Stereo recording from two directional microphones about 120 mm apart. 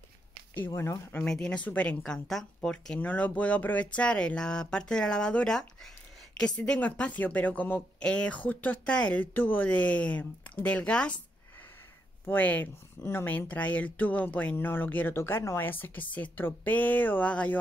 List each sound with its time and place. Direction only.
0.7 s speech: 20° left (ahead or behind)
1.2 s speech: 5° left (ahead or behind)
12.3 s speech: 15° left (ahead or behind)